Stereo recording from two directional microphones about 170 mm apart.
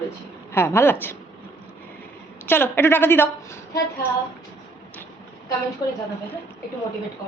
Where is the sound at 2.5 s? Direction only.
15° left (ahead or behind).